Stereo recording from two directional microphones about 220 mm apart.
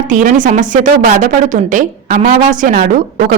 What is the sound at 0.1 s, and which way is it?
A woman's voice, 35° right (ahead or behind).